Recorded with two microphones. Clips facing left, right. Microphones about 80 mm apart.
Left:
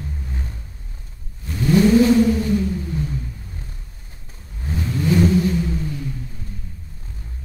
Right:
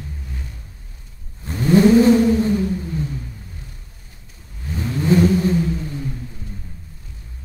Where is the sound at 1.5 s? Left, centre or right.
Right.